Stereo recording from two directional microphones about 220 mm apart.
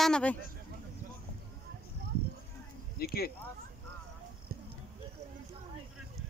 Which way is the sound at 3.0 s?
45° left (ahead or behind).